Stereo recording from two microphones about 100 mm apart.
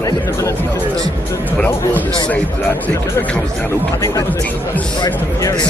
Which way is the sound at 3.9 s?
30° left (ahead or behind).